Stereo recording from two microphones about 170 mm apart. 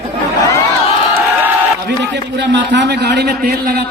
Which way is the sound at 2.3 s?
90° right.